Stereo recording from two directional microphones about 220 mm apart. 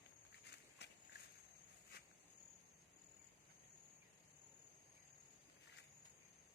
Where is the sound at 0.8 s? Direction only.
50° left (ahead or behind).